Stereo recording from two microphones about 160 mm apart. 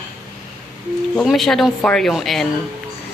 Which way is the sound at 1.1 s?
Centre (ahead or behind).